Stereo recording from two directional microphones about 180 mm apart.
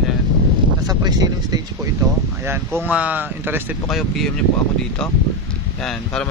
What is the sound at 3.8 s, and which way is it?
Speech, centre (ahead or behind).